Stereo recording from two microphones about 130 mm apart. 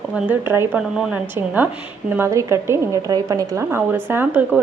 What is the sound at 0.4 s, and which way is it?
Speech, 20° right (ahead or behind).